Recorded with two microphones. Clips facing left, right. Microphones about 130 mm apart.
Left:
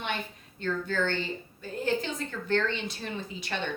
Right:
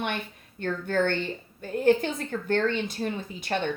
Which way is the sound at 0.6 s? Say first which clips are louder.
Right 4 dB; 55° right (ahead or behind).